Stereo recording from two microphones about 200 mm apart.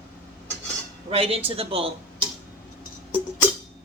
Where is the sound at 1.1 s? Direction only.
30° right (ahead or behind).